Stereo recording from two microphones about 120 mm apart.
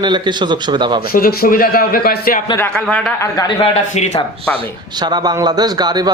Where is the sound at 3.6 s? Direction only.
65° left (ahead or behind).